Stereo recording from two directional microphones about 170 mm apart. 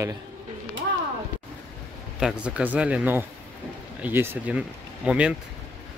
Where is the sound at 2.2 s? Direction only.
5° right (ahead or behind).